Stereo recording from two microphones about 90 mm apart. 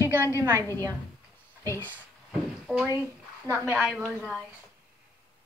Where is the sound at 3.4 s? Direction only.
20° right (ahead or behind).